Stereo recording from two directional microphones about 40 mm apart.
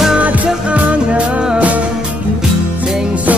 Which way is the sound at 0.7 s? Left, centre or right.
Right.